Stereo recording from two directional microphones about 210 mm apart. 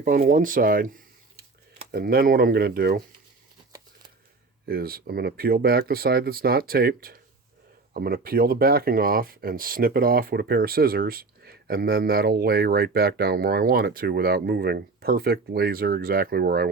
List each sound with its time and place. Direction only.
0.0 s speech: 40° right (ahead or behind)
4.7 s speech: 45° right (ahead or behind)